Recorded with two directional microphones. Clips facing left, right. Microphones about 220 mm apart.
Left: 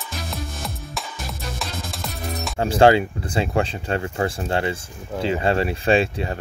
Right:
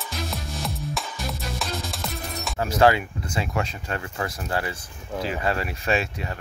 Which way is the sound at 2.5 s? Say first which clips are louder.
Left 4 dB; 30° left (ahead or behind).